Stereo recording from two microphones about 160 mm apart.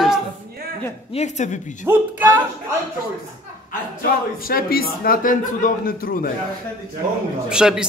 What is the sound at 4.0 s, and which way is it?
A man's voice, 65° left (ahead or behind).